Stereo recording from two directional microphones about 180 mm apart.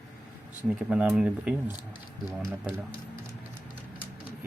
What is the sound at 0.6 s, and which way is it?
Speech, 5° right (ahead or behind).